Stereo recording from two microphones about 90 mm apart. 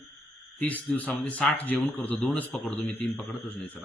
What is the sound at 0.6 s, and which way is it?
A man's voice, 15° left (ahead or behind).